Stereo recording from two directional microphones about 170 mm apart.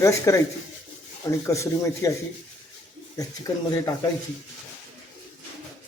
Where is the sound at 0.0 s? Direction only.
15° left (ahead or behind).